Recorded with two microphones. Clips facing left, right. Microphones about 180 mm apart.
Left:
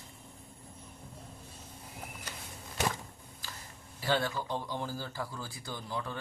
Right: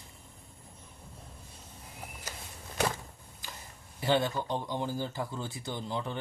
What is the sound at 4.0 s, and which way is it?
A man's voice, 20° right (ahead or behind).